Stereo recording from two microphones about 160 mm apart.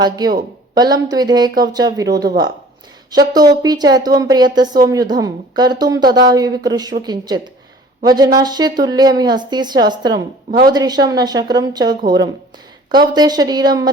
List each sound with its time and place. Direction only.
0.0 s a woman's voice: 25° right (ahead or behind)
3.1 s a woman's voice: 25° right (ahead or behind)